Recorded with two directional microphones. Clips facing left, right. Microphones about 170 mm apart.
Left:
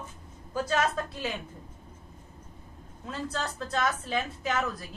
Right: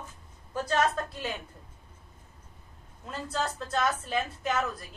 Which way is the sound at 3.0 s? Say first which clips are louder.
Right 1 dB; centre (ahead or behind).